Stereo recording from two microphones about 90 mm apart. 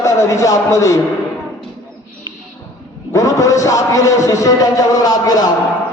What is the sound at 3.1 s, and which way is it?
A man's voice, 35° left (ahead or behind).